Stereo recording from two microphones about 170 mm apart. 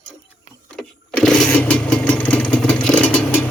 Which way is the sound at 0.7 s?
5° left (ahead or behind).